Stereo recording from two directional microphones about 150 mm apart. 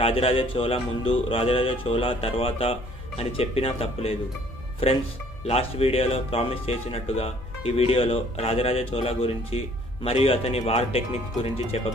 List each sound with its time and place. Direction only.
0.0 s speech: 40° left (ahead or behind)